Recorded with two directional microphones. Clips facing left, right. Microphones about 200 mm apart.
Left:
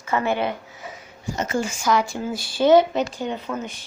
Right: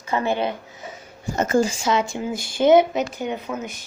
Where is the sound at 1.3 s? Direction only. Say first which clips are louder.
Right 5 dB; 50° right (ahead or behind).